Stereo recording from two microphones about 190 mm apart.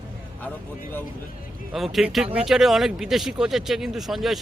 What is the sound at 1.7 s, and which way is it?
Speech, centre (ahead or behind).